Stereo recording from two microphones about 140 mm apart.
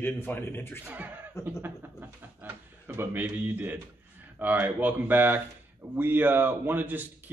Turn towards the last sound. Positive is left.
turn(degrees=-15)  # may be behind; listen again after turning